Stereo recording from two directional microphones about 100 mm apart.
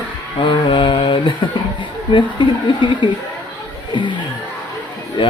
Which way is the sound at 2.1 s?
55° left (ahead or behind).